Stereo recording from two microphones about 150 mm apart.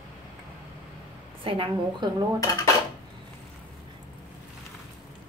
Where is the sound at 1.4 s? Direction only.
35° right (ahead or behind).